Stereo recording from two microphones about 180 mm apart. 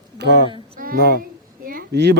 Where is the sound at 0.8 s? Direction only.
55° right (ahead or behind).